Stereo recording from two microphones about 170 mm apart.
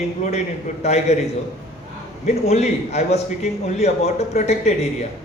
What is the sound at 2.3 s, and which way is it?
A man's voice, 40° left (ahead or behind).